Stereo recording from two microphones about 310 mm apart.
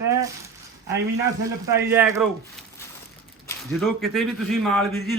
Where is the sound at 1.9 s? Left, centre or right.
Centre.